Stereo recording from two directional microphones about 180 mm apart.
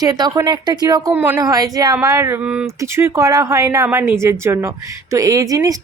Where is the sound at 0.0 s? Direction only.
20° right (ahead or behind).